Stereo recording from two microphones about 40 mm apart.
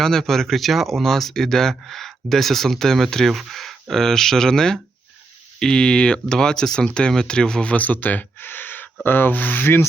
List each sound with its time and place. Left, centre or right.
0.0 s speech: centre
7.7 s speech: left